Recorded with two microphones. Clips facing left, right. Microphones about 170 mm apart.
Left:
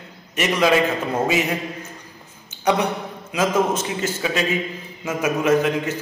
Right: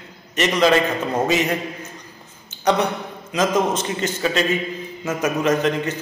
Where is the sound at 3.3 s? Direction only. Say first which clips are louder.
Even; 5° left (ahead or behind).